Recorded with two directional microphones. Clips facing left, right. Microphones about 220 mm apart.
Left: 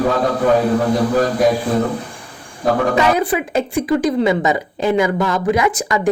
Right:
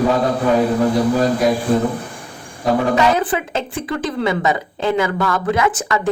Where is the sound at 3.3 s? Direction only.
15° left (ahead or behind).